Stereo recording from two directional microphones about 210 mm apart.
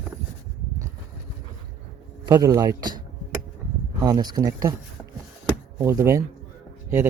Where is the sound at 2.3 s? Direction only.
15° right (ahead or behind).